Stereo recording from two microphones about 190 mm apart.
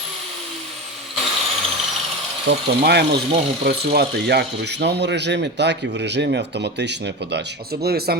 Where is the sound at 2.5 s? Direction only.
60° right (ahead or behind).